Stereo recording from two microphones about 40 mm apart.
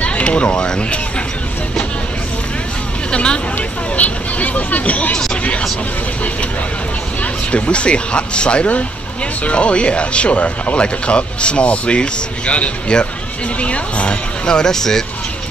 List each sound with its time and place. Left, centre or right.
0.0 s a sound: left
3.1 s speech: left
3.5 s speech: left
7.5 s speech: left; by 15.0 s centre